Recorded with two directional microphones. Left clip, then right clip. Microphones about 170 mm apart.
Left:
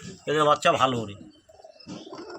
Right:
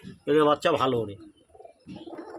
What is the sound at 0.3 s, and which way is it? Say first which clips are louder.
Speech: left 1 dB; 40° right (ahead or behind).